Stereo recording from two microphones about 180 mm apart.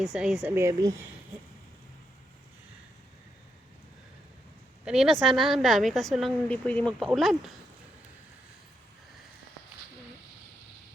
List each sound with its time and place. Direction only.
0.0 s a woman's voice: centre (ahead or behind)
0.4 s speech: 15° right (ahead or behind)
4.9 s a woman's voice: centre (ahead or behind)